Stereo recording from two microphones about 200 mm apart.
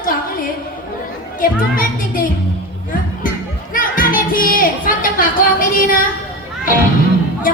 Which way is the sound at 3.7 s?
45° left (ahead or behind).